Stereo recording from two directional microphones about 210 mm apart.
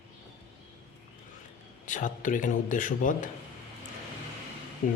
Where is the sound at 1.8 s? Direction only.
40° left (ahead or behind).